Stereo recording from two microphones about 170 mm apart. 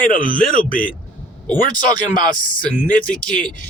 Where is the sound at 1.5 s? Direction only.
55° left (ahead or behind).